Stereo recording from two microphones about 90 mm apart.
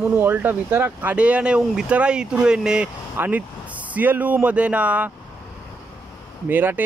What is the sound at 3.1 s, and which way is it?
Speech, 20° right (ahead or behind).